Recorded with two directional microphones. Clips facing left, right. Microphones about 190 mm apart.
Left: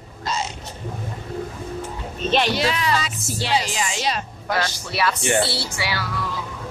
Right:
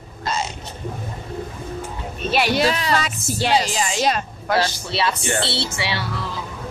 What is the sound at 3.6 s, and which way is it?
Speech, 35° right (ahead or behind).